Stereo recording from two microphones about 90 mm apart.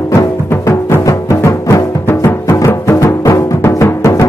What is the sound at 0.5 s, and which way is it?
Music, 30° left (ahead or behind).